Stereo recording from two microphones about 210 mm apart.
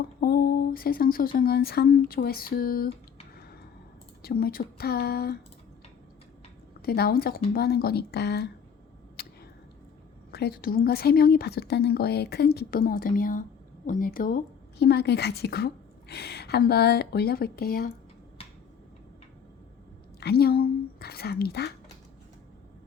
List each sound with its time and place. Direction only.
0.2 s speech: 45° left (ahead or behind)
4.2 s a woman's voice: 45° left (ahead or behind)
6.8 s a woman's voice: 50° left (ahead or behind)
9.2 s a sound: 45° left (ahead or behind)
10.3 s a woman's voice: 50° left (ahead or behind)
20.1 s a woman's voice: 50° left (ahead or behind)